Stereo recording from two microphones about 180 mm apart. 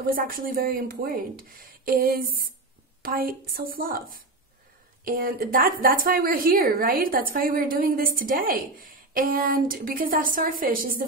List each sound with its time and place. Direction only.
0.0 s a woman's voice: 50° right (ahead or behind)